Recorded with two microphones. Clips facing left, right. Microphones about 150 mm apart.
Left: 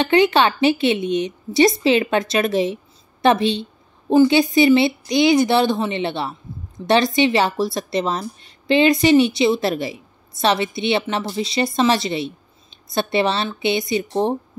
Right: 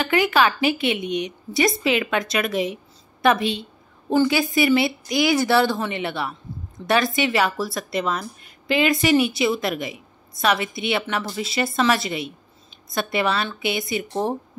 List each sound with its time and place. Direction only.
0.0 s a woman's voice: 25° left (ahead or behind)